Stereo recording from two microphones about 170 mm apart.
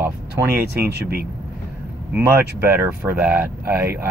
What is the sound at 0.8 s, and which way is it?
Speech, 65° right (ahead or behind).